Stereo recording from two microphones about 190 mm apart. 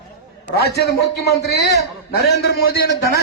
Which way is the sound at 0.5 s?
60° left (ahead or behind).